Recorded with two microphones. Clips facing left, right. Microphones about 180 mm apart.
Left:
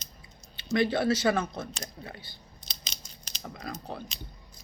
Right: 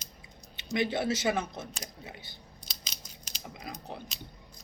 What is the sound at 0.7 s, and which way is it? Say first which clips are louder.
Speech: left 4 dB; 20° right (ahead or behind).